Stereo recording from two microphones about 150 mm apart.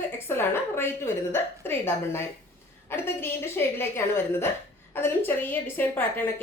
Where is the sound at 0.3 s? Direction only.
15° left (ahead or behind).